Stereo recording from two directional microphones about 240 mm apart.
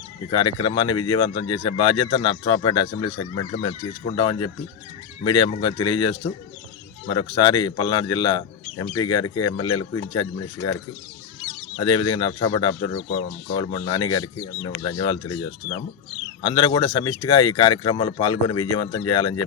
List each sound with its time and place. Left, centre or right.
0.3 s speech: centre
11.8 s speech: centre
16.4 s speech: centre